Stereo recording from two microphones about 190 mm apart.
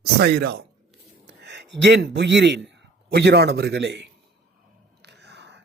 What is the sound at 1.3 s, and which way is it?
A man's voice, 65° right (ahead or behind).